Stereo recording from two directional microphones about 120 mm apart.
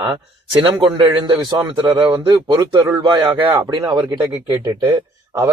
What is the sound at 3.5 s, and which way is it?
Speech, 25° right (ahead or behind).